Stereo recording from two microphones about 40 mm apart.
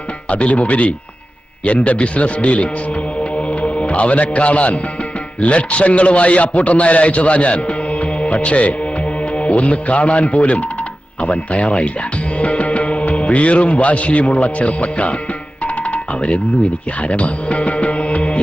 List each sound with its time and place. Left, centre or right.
0.3 s a man's voice: left
3.3 s music: left
5.4 s a man's voice: left
15.6 s music: left